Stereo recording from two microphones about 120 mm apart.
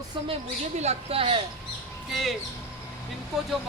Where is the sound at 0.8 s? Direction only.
60° right (ahead or behind).